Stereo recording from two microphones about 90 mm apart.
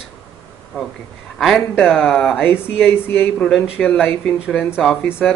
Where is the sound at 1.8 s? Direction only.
Centre (ahead or behind).